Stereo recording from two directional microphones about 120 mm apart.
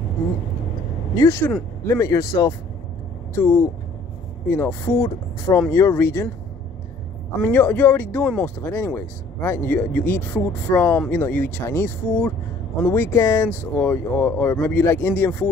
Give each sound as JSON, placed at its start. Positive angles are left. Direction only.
{"t": 1.1, "sound": "speech", "side_deg": 20}
{"t": 7.4, "sound": "speech", "side_deg": 15}